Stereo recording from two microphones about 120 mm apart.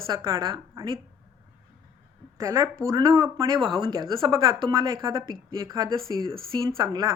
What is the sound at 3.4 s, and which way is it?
A woman's voice, 40° right (ahead or behind).